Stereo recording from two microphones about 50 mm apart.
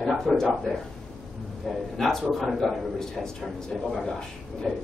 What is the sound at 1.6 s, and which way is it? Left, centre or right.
A man's voice, centre.